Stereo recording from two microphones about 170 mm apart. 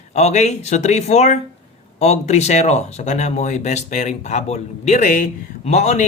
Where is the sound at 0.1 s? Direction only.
40° left (ahead or behind).